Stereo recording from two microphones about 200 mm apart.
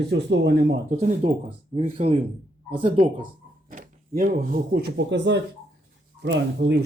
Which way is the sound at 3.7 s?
40° right (ahead or behind).